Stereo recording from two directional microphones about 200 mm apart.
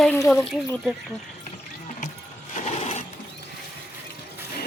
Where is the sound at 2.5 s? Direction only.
35° left (ahead or behind).